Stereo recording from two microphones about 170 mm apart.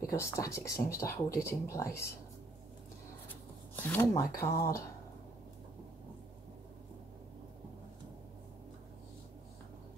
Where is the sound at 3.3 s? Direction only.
10° left (ahead or behind).